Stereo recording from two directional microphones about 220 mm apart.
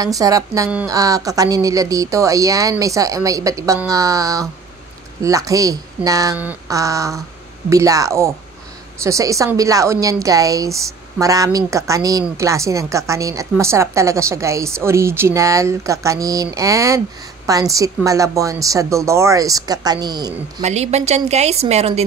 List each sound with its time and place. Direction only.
0.0 s a woman's voice: 15° right (ahead or behind)
20.6 s speech: 30° right (ahead or behind)